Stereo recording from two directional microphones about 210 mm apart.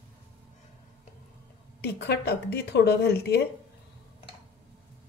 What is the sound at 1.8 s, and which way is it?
A woman's voice, 50° left (ahead or behind).